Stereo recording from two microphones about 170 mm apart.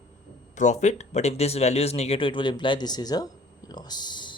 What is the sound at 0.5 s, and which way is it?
Speech, 45° left (ahead or behind).